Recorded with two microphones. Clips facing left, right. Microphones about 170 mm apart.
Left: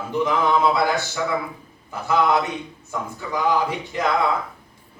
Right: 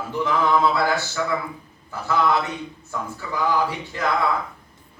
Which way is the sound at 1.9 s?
15° left (ahead or behind).